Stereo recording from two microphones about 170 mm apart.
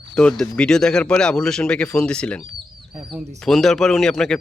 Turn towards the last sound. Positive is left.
turn(degrees=0)  # may be behind; listen again after turning